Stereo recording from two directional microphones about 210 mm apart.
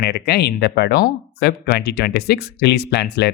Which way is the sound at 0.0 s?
50° left (ahead or behind).